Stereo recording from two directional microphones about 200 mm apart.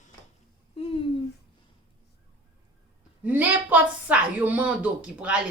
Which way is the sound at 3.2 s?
10° right (ahead or behind).